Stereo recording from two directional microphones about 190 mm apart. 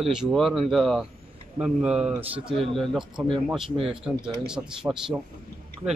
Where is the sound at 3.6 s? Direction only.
30° right (ahead or behind).